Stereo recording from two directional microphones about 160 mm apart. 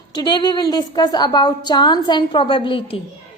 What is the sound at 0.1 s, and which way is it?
A woman's voice, 25° left (ahead or behind).